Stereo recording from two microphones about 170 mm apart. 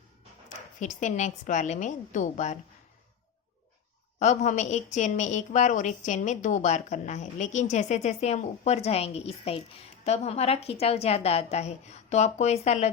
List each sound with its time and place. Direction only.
0.8 s a woman's voice: 45° left (ahead or behind)
4.2 s a woman's voice: 45° left (ahead or behind)